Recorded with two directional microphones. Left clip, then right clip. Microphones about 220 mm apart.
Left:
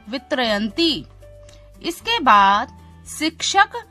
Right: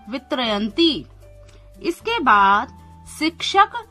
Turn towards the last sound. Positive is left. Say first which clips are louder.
# even
turn(degrees=25)  # may be behind; listen again after turning